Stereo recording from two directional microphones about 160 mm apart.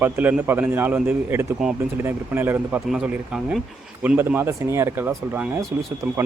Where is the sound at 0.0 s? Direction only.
10° right (ahead or behind).